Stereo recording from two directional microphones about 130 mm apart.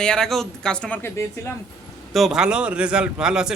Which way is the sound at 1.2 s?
20° left (ahead or behind).